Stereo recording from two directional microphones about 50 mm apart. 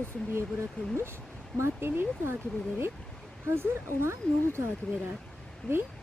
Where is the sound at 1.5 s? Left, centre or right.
Right.